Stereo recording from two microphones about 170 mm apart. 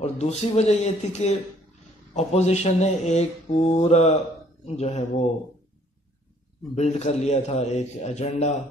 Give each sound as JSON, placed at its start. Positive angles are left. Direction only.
{"t": 0.0, "sound": "mantra", "side_deg": 40}
{"t": 6.7, "sound": "mantra", "side_deg": 40}